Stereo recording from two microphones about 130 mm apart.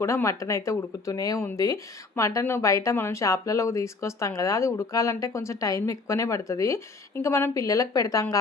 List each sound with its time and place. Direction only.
0.0 s speech: 20° left (ahead or behind)